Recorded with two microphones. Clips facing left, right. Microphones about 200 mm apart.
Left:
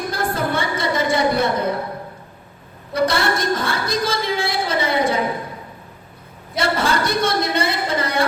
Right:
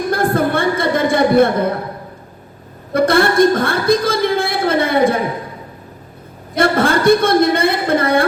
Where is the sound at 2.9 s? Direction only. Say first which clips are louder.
Right 6 dB; 55° right (ahead or behind).